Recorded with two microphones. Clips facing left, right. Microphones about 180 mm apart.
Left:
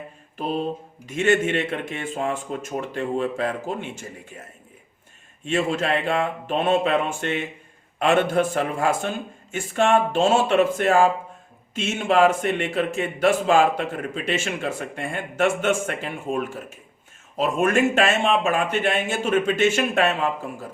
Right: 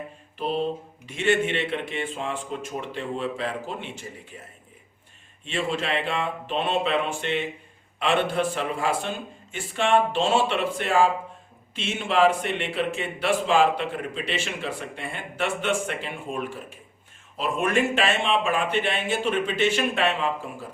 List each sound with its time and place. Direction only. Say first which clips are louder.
0.3 s mantra: left 1 dB; 45° left (ahead or behind)
1.0 s speech: left 3 dB; 45° left (ahead or behind)
5.5 s speech: left 5 dB; 45° left (ahead or behind)